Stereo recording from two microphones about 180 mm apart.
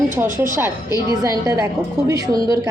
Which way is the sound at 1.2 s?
20° right (ahead or behind).